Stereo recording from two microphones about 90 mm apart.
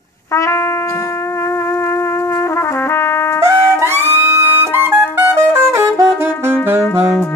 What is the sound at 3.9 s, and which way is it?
Music, 30° right (ahead or behind).